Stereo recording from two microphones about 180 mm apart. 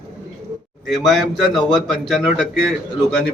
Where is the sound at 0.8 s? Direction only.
Centre (ahead or behind).